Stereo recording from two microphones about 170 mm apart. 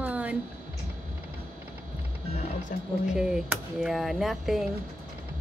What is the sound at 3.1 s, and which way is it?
Speech, 5° right (ahead or behind).